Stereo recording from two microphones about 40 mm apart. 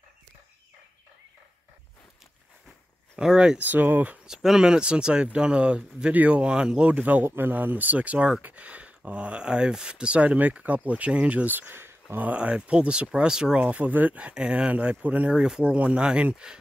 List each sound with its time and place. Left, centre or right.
3.2 s speech: right
3.6 s speech: right
4.3 s speech: centre
4.6 s speech: right
6.9 s speech: right
7.2 s speech: right
11.4 s speech: right
12.4 s speech: right
13.1 s speech: centre
13.6 s speech: right
14.3 s speech: right
14.7 s speech: right
15.3 s speech: centre
15.6 s speech: right